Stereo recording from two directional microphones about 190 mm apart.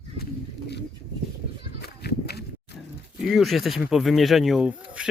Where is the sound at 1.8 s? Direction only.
55° left (ahead or behind).